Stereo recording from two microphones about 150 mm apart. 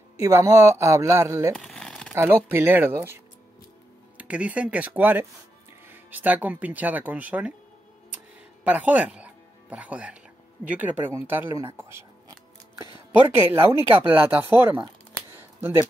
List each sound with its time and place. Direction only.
0.2 s speech: 20° right (ahead or behind)
1.6 s crumpling: 5° left (ahead or behind)
2.5 s speech: 15° right (ahead or behind)
4.2 s speech: 10° right (ahead or behind)
8.6 s speech: 10° right (ahead or behind)
15.3 s a sound: 15° right (ahead or behind)